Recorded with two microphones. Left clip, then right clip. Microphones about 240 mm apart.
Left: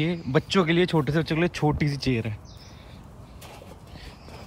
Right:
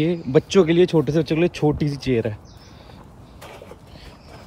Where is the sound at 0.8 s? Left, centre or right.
Centre.